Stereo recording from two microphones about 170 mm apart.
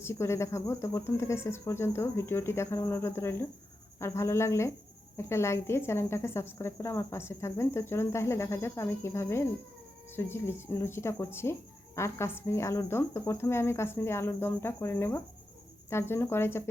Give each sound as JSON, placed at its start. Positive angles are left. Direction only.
{"t": 0.0, "sound": "a woman's voice", "side_deg": 15}